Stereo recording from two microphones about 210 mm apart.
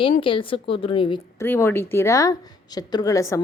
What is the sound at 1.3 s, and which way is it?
A woman's voice, 10° left (ahead or behind).